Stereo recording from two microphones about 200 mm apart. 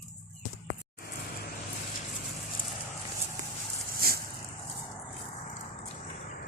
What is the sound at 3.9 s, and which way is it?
Vehicle, 50° right (ahead or behind).